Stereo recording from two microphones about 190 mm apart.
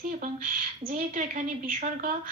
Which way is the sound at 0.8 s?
45° right (ahead or behind).